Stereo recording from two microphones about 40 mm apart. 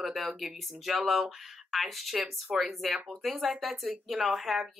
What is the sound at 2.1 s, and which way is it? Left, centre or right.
Speech, centre.